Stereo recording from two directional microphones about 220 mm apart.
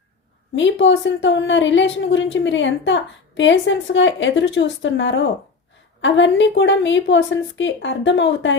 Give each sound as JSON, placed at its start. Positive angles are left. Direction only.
{"t": 0.5, "sound": "speech", "side_deg": 55}